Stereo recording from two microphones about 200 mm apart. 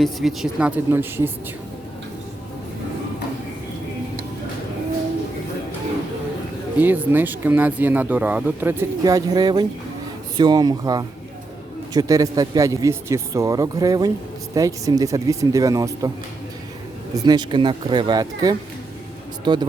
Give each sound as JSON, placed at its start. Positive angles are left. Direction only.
{"t": 0.0, "sound": "speech", "side_deg": 0}
{"t": 0.9, "sound": "speech", "side_deg": -10}
{"t": 6.7, "sound": "speech", "side_deg": -10}
{"t": 17.2, "sound": "speech", "side_deg": -20}